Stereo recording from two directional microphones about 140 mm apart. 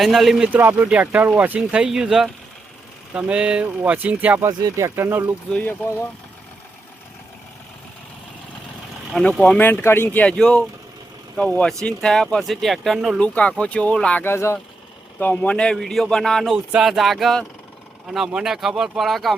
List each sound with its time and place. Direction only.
0.0 s speech: centre (ahead or behind)
5.5 s speech: 15° left (ahead or behind)
9.4 s speech: 10° left (ahead or behind)